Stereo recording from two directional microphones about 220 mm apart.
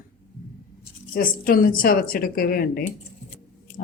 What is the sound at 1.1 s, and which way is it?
Speech, 40° left (ahead or behind).